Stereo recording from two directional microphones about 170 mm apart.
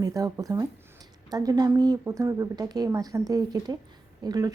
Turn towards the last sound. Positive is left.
turn(degrees=-20)  # may be behind; listen again after turning